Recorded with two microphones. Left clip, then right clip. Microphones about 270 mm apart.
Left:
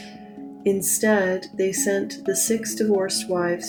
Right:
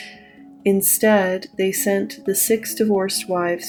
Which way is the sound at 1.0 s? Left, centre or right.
Right.